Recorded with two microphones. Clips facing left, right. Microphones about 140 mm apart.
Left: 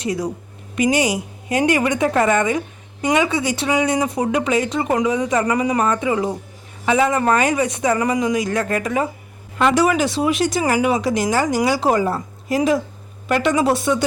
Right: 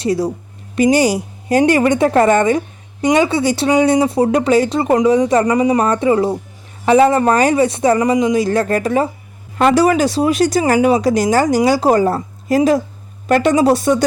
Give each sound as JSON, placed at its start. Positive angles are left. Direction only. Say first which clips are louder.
{"t": 0.0, "sound": "speech", "louder": "right 6 dB", "side_deg": -35}
{"t": 5.8, "sound": "speech", "louder": "right 5 dB", "side_deg": -35}